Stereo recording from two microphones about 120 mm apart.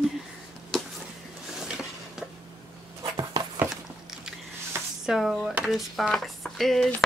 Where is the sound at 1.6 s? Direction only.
5° right (ahead or behind).